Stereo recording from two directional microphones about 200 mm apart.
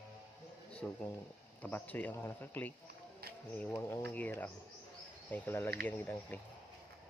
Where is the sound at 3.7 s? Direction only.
10° left (ahead or behind).